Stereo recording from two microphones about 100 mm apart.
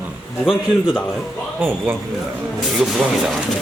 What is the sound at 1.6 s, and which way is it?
Speech, 20° right (ahead or behind).